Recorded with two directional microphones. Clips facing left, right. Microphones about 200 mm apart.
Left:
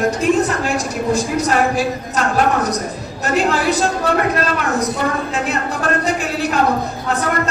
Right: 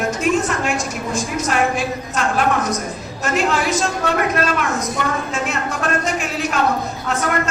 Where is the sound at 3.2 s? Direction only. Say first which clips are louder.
Left 2 dB; 35° left (ahead or behind).